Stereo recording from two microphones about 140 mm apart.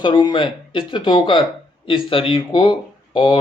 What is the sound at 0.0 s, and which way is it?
Speech, 30° left (ahead or behind).